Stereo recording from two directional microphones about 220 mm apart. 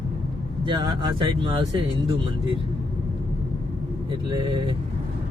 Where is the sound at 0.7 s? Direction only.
20° right (ahead or behind).